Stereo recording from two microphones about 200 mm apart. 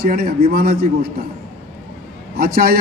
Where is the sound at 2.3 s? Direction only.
50° right (ahead or behind).